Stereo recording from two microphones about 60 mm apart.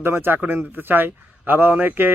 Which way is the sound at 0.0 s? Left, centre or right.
Right.